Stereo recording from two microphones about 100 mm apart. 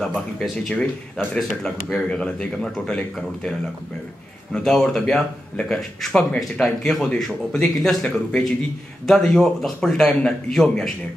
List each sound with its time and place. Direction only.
0.0 s speech: 5° left (ahead or behind)
4.6 s speech: 5° left (ahead or behind)